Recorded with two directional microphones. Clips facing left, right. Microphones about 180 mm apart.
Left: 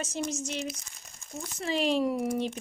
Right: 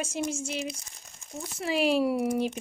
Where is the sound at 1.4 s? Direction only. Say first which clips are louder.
Right 2 dB; 10° right (ahead or behind).